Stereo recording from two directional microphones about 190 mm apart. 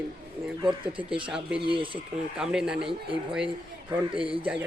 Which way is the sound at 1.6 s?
25° right (ahead or behind).